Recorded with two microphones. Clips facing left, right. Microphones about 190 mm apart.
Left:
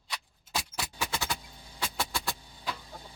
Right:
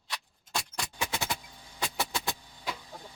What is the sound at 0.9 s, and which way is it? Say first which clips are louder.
Vehicle: right 1 dB; 20° right (ahead or behind).